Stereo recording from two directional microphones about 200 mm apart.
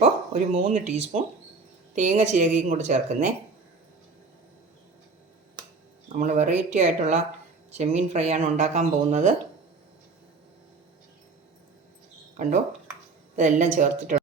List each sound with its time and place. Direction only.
0.0 s speech: 30° right (ahead or behind)
6.1 s speech: 35° right (ahead or behind)
13.3 s speech: 40° right (ahead or behind)